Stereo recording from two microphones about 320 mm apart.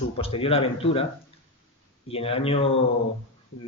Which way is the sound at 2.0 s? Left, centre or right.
Centre.